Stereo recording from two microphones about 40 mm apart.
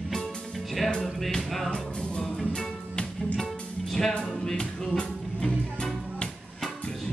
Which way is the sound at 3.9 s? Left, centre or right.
Centre.